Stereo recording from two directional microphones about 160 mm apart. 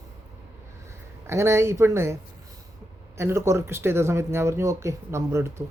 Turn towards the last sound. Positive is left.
turn(degrees=-15)  # may be behind; listen again after turning